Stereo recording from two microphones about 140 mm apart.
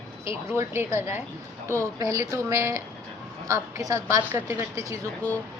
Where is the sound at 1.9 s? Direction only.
25° right (ahead or behind).